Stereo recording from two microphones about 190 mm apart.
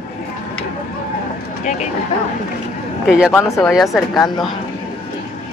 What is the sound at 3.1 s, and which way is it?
Speech, 5° right (ahead or behind).